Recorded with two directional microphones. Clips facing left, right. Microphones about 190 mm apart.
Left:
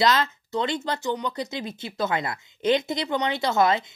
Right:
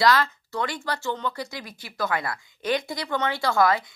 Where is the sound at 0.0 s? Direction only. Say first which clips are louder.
Right 1 dB; 20° left (ahead or behind).